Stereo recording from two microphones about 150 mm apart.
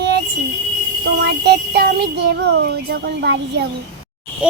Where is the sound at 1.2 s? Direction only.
90° right.